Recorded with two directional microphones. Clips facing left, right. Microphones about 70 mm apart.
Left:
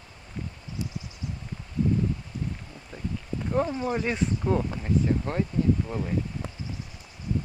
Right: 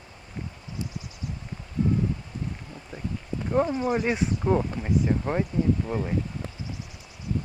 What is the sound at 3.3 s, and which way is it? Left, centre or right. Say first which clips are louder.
Speech: right 3 dB; centre.